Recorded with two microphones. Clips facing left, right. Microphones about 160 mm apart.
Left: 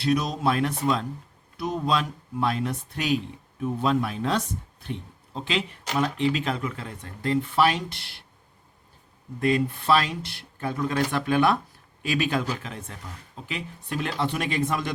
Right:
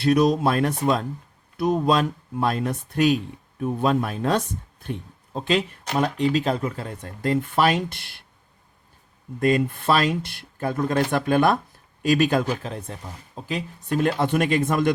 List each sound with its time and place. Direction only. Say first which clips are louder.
0.0 s speech: right 6 dB; 55° right (ahead or behind)
9.4 s speech: right 3 dB; 45° right (ahead or behind)